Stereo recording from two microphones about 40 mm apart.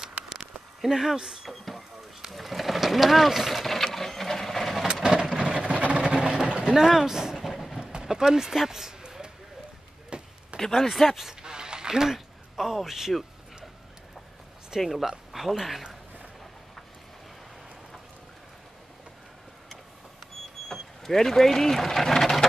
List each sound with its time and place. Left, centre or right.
0.7 s speech: centre
1.5 s vehicle: centre
2.3 s a sound: centre
5.0 s vehicle: centre
5.7 s vehicle: right; by 6.5 s centre
6.7 s a sound: centre
7.4 s train: centre
7.8 s a sound: centre
10.6 s speech: centre
10.9 s speech: centre
11.2 s a sound: centre
14.8 s speech: centre
20.6 s speech: centre